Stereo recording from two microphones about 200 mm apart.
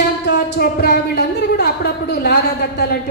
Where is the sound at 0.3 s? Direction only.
55° left (ahead or behind).